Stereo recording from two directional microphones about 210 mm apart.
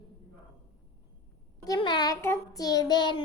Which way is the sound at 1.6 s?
20° left (ahead or behind).